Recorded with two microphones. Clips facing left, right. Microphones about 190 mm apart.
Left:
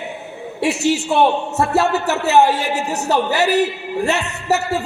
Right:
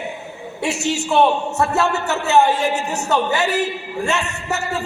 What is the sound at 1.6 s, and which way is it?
A man's voice, 35° left (ahead or behind).